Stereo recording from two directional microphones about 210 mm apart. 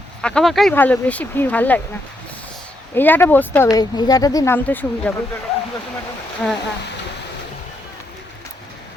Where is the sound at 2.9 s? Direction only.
10° left (ahead or behind).